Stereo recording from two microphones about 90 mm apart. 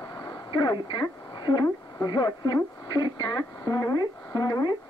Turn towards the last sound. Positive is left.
turn(degrees=45)  # may be behind; listen again after turning